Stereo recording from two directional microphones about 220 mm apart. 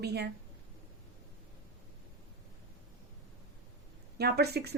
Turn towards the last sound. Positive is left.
turn(degrees=-45)  # may be behind; listen again after turning